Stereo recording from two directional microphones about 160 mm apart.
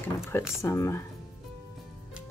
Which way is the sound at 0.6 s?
20° left (ahead or behind).